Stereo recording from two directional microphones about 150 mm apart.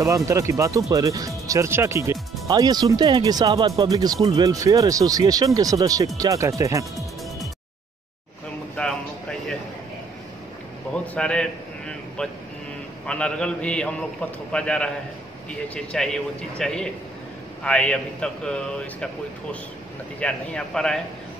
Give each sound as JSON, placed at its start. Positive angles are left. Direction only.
{"t": 0.0, "sound": "speech", "side_deg": -20}
{"t": 8.8, "sound": "a sound", "side_deg": 10}
{"t": 10.9, "sound": "a man's voice", "side_deg": 5}
{"t": 20.2, "sound": "speech", "side_deg": 5}